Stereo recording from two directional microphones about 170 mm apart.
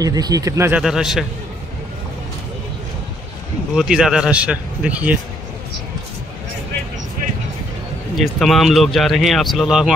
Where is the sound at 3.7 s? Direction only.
5° right (ahead or behind).